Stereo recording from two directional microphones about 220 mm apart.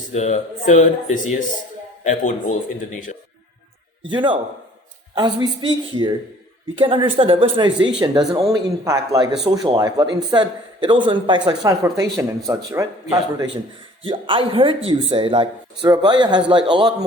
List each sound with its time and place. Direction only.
0.1 s speech: 30° left (ahead or behind)
4.1 s a man's voice: 20° right (ahead or behind)